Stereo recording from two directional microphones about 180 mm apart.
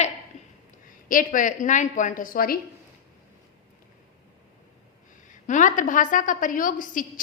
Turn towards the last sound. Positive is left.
turn(degrees=50)  # may be behind; listen again after turning